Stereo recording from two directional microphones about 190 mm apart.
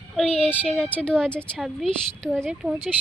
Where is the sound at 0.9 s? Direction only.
5° left (ahead or behind).